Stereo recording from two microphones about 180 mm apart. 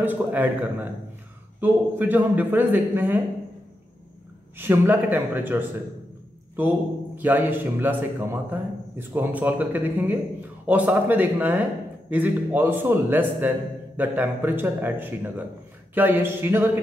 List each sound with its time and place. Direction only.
0.0 s a man's voice: 10° right (ahead or behind)
4.6 s a man's voice: 10° right (ahead or behind)
7.2 s a man's voice: 10° right (ahead or behind)